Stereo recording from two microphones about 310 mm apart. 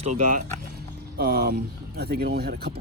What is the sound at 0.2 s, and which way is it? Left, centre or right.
Speech, right.